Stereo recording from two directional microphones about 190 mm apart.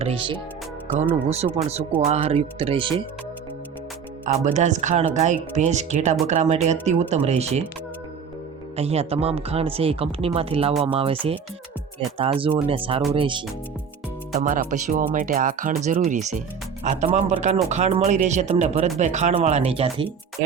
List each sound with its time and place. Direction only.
0.0 s music: 30° right (ahead or behind)
0.9 s speech: 35° right (ahead or behind)
4.3 s speech: 40° right (ahead or behind)
8.7 s speech: 35° right (ahead or behind)
14.3 s speech: 40° right (ahead or behind)